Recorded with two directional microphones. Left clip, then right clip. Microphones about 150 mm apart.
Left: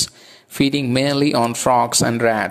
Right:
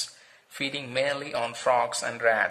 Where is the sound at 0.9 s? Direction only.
40° left (ahead or behind).